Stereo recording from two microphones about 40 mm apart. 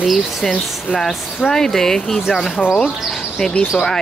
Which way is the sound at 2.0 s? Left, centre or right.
Centre.